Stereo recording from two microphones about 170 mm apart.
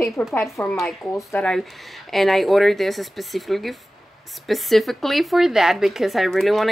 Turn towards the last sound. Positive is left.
turn(degrees=0)  # may be behind; listen again after turning